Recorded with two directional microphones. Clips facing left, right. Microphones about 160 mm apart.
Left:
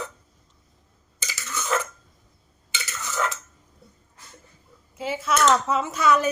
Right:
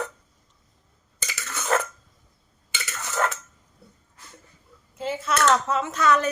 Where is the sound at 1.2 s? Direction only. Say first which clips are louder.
Right 1 dB; 60° right (ahead or behind).